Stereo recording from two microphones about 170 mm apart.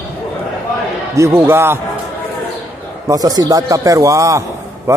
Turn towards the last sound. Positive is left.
turn(degrees=-20)  # may be behind; listen again after turning